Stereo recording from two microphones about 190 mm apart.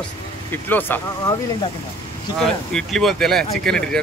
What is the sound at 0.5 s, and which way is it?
Speech, 10° left (ahead or behind).